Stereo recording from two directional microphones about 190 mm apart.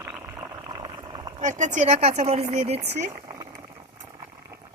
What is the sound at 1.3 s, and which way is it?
Speech, 40° right (ahead or behind).